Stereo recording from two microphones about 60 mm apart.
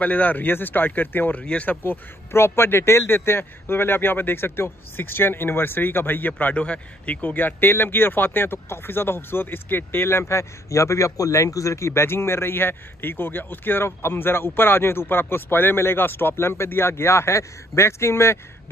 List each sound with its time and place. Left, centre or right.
0.0 s speech: left
1.4 s speech: centre
1.7 s a man's voice: left
6.4 s speech: left